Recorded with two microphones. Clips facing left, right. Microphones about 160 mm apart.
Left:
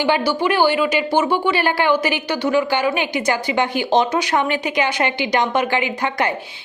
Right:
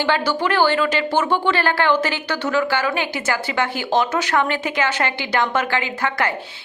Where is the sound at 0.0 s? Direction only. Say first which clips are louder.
Left 2 dB; 15° left (ahead or behind).